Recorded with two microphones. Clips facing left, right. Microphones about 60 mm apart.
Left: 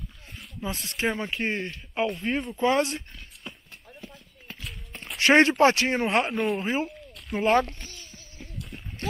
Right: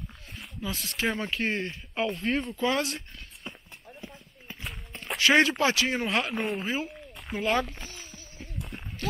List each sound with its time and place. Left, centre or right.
0.6 s speech: left
2.5 s speech: left
3.4 s a sound: centre
5.2 s speech: left
6.3 s speech: centre
6.6 s speech: left
7.3 s speech: right
8.0 s a sound: centre